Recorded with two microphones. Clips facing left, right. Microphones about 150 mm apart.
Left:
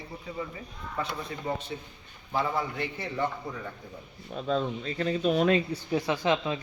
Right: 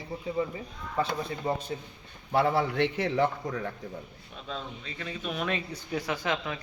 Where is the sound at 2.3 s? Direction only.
65° right (ahead or behind); by 3.3 s 90° right.